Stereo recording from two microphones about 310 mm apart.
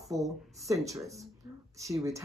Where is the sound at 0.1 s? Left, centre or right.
Centre.